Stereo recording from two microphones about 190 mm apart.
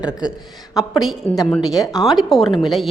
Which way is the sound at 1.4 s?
Centre (ahead or behind).